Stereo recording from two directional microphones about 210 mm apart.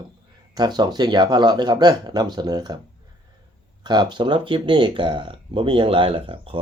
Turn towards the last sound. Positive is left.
turn(degrees=-25)  # may be behind; listen again after turning